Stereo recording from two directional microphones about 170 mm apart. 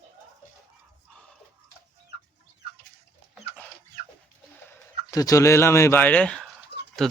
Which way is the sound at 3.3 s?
10° left (ahead or behind).